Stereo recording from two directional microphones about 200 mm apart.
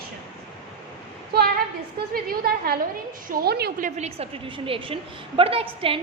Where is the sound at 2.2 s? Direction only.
50° right (ahead or behind).